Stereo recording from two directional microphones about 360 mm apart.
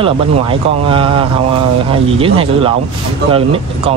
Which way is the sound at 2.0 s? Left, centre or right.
Centre.